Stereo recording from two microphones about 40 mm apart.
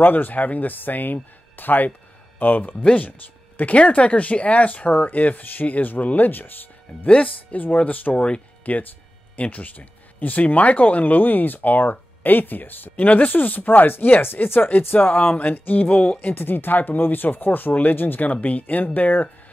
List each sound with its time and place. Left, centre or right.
0.0 s speech: left
3.7 s speech: left
7.5 s speech: left
16.2 s speech: left
18.3 s speech: left